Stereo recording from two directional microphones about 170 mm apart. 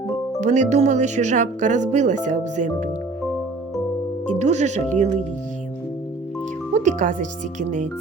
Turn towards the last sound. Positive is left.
turn(degrees=-45)  # may be behind; listen again after turning